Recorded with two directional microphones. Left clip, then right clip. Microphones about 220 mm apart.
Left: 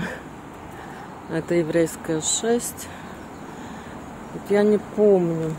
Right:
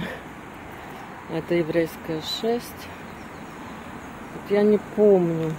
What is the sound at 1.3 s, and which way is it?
Speech, 10° left (ahead or behind).